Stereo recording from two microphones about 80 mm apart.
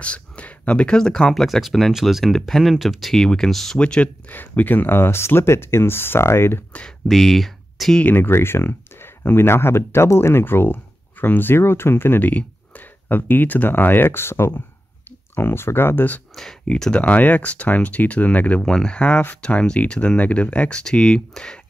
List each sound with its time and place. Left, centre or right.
0.0 s speech: centre
3.8 s speech: centre; by 6.6 s left
7.1 s speech: centre
8.0 s speech: left
16.3 s speech: centre